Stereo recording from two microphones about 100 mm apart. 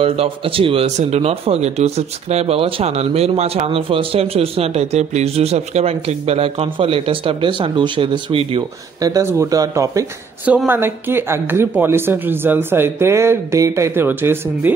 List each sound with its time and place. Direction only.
0.0 s speech: 70° right (ahead or behind)
9.0 s speech: 40° right (ahead or behind)
10.7 s speech: 25° right (ahead or behind)